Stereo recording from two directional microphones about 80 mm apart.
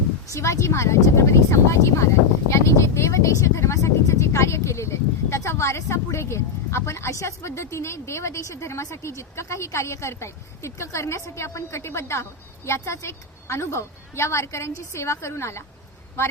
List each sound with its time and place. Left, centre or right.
0.3 s speech: left